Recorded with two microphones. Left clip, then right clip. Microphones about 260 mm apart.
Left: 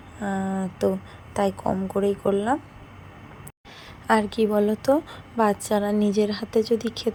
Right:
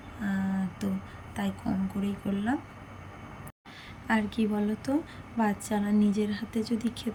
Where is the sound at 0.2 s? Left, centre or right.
Centre.